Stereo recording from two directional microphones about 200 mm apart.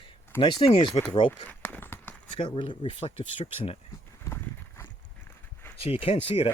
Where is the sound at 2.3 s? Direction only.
25° left (ahead or behind).